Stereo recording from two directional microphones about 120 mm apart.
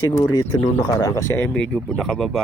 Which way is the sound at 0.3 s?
35° left (ahead or behind).